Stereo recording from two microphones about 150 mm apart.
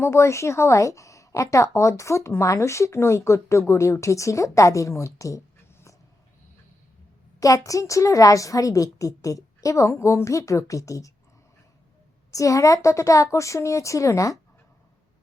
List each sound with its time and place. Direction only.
0.0 s a woman's voice: 20° left (ahead or behind)
7.3 s a woman's voice: 20° left (ahead or behind)
12.3 s a woman's voice: 20° left (ahead or behind)